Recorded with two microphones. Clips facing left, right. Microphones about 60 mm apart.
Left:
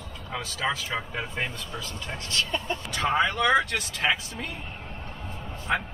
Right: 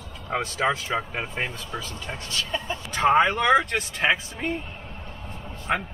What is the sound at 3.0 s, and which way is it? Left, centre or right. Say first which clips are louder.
Speech: right 7 dB; right.